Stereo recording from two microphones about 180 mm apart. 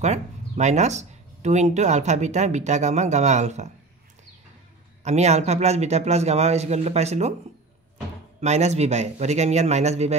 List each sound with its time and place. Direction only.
0.0 s speech: 40° right (ahead or behind)
5.0 s speech: 40° right (ahead or behind)
8.4 s speech: 40° right (ahead or behind)